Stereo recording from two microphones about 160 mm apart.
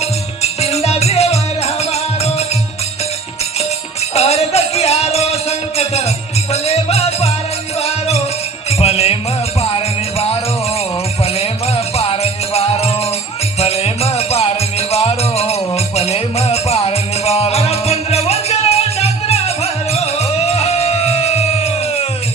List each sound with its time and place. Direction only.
0.0 s music: 40° left (ahead or behind)
4.1 s music: 40° left (ahead or behind)
11.3 s music: 40° left (ahead or behind)